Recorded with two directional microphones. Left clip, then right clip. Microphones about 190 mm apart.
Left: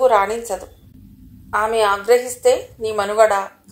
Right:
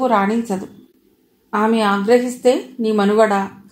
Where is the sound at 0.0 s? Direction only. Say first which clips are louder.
Left 2 dB; 35° left (ahead or behind).